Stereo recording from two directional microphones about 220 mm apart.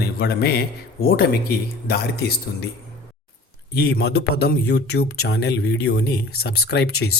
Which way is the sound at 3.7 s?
45° left (ahead or behind).